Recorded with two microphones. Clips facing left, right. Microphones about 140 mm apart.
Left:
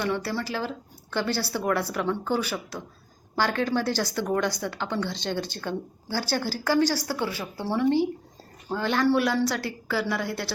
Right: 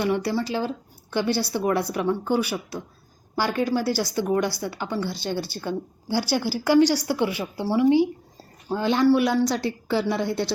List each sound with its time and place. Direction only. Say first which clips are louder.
0.0 s speech: right 4 dB; 15° right (ahead or behind)